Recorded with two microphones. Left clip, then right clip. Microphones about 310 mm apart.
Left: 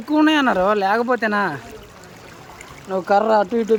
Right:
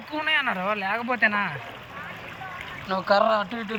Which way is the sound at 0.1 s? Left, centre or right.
Left.